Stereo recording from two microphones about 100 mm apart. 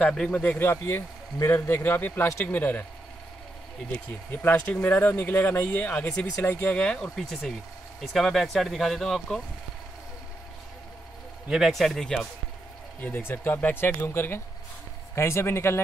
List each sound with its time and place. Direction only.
0.0 s speech: 10° left (ahead or behind)
4.3 s speech: 20° left (ahead or behind); by 9.4 s 5° left (ahead or behind)
11.4 s speech: 5° right (ahead or behind)
13.0 s speech: 20° left (ahead or behind)